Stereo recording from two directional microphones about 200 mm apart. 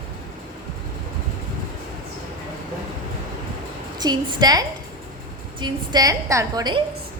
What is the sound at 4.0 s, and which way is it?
A woman's voice, 20° right (ahead or behind).